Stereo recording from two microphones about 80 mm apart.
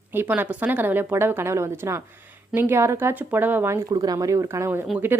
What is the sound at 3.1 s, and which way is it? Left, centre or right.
Speech, right.